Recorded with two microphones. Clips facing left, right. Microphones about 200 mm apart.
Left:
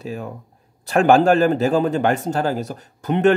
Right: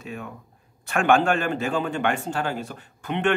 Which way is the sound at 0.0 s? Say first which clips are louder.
Left 6 dB; 35° left (ahead or behind).